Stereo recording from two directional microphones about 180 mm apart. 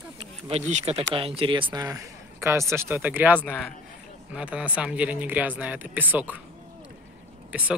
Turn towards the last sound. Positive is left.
turn(degrees=-10)  # may be behind; listen again after turning